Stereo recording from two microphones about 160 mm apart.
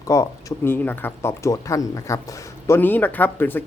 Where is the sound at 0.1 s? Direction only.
20° left (ahead or behind).